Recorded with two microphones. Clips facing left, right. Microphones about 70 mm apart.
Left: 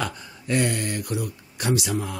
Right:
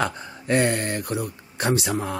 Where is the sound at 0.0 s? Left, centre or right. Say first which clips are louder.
Right 4 dB; right.